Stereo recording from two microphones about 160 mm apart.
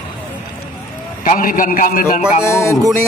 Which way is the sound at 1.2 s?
60° left (ahead or behind).